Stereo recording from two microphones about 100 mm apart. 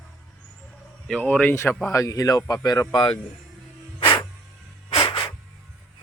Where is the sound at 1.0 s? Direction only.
10° left (ahead or behind).